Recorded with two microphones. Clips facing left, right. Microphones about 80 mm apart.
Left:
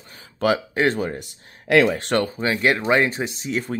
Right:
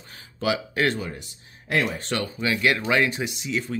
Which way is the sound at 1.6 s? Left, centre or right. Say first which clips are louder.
Left 8 dB; left.